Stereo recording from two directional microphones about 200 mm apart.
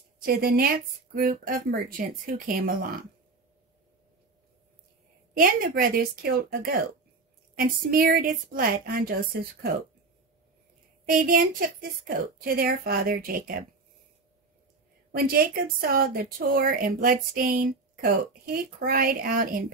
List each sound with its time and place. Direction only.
0.2 s speech: 50° right (ahead or behind)
5.3 s speech: 45° right (ahead or behind)
11.1 s speech: 45° right (ahead or behind)
15.1 s speech: 50° right (ahead or behind)